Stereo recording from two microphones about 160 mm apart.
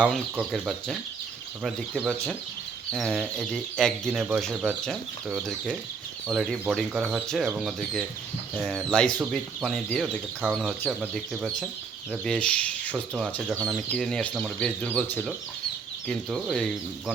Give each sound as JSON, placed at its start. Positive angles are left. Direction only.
{"t": 0.3, "sound": "speech", "side_deg": -5}
{"t": 16.0, "sound": "speech", "side_deg": 5}